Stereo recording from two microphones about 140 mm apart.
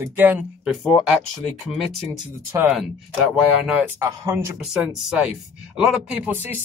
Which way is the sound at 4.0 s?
20° right (ahead or behind).